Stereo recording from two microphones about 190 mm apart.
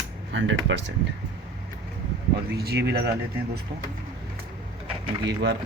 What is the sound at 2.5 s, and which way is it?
Speech, 60° right (ahead or behind).